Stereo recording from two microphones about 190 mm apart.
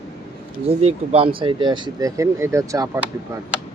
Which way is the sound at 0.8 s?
30° right (ahead or behind).